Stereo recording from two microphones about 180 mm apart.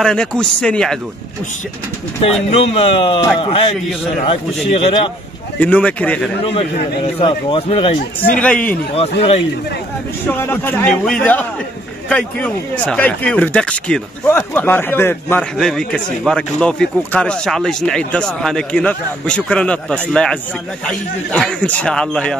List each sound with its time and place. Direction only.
0.0 s speech: 5° left (ahead or behind)
2.2 s speech: 30° left (ahead or behind)
4.7 s speech: 30° left (ahead or behind)
5.6 s speech: 10° left (ahead or behind)
7.2 s speech: 30° left (ahead or behind)
8.4 s speech: 5° left (ahead or behind)
10.3 s speech: 10° left (ahead or behind)